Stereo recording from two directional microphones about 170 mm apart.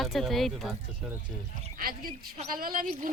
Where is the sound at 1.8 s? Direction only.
55° right (ahead or behind).